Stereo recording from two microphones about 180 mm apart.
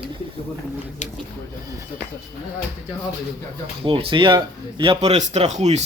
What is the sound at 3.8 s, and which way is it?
A man's voice, 30° right (ahead or behind).